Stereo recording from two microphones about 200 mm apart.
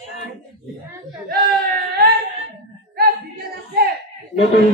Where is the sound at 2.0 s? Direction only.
50° right (ahead or behind).